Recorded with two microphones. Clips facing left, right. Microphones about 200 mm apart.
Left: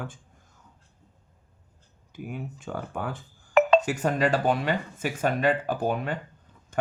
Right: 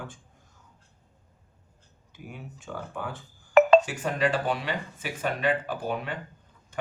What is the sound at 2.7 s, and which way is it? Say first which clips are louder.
Speech: left 3 dB; 45° left (ahead or behind).